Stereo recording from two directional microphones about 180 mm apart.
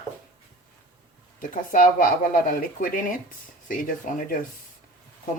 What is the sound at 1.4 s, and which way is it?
Speech, 50° left (ahead or behind).